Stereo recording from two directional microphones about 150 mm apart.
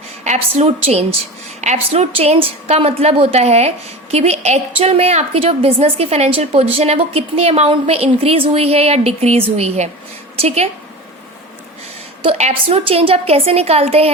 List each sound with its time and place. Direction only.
0.3 s a woman's voice: 45° right (ahead or behind)
12.2 s a woman's voice: 45° right (ahead or behind)